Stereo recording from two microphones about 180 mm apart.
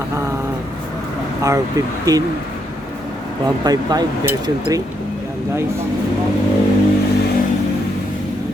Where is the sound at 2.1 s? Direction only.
20° right (ahead or behind).